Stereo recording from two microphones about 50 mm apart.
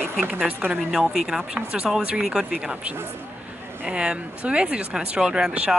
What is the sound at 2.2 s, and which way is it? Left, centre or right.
Speech, centre.